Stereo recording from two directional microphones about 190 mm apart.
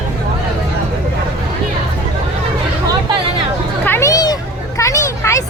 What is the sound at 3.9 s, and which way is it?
Children playing, 15° left (ahead or behind).